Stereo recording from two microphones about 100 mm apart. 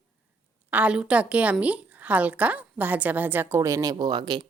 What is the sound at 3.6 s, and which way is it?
Speech, 35° right (ahead or behind).